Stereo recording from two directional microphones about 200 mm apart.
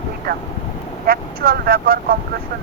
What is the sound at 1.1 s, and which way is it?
Speech, 45° right (ahead or behind).